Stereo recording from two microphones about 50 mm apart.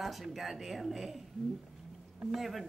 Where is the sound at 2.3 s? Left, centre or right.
Centre.